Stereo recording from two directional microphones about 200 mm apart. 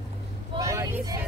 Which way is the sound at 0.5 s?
15° right (ahead or behind).